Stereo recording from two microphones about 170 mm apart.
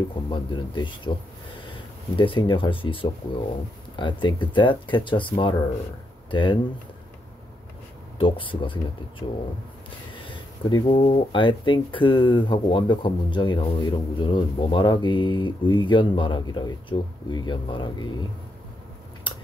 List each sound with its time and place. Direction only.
0.1 s speech: 30° left (ahead or behind)
2.1 s speech: 30° left (ahead or behind)
8.2 s speech: 30° left (ahead or behind)
10.7 s speech: 25° left (ahead or behind)